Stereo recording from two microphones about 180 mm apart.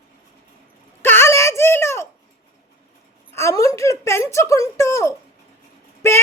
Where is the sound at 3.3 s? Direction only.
15° left (ahead or behind).